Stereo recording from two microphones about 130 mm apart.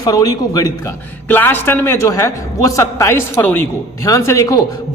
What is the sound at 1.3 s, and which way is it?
A man's voice, 15° left (ahead or behind).